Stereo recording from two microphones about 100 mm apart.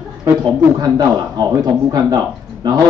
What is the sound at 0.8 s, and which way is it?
Speech, 40° right (ahead or behind).